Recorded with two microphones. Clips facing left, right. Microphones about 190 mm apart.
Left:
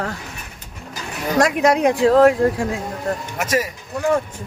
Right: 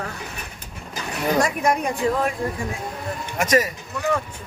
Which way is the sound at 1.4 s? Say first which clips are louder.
Left 7 dB; 90° left.